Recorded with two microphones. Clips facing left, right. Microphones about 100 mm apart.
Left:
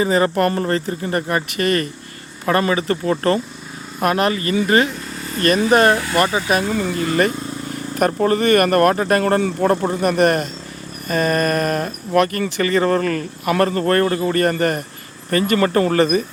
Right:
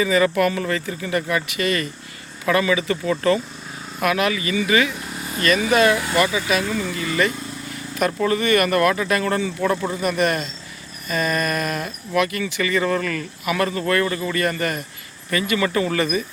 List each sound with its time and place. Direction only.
0.0 s speech: 40° left (ahead or behind)